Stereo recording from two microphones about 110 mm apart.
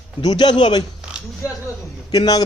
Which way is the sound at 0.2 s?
40° left (ahead or behind).